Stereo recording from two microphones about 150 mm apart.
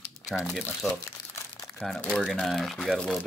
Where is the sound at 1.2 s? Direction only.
90° left.